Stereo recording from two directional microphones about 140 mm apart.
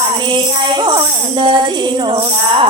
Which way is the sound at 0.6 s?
35° right (ahead or behind).